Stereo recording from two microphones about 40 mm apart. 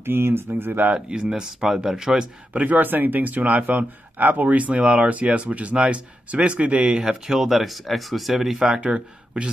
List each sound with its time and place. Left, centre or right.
0.0 s speech: right
1.2 s speech: centre
2.5 s speech: right
2.8 s speech: right
6.9 s speech: centre
7.3 s speech: centre
8.8 s speech: right